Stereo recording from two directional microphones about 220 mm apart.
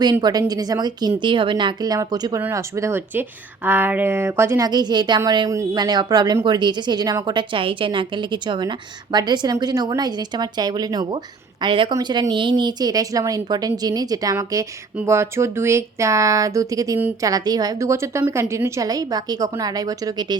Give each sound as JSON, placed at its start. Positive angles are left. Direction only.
{"t": 0.0, "sound": "a woman's voice", "side_deg": -20}